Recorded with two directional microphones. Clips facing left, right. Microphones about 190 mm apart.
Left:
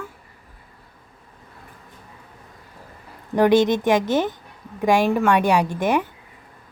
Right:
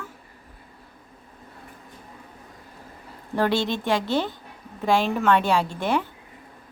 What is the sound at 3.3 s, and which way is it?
A woman's voice, 15° left (ahead or behind).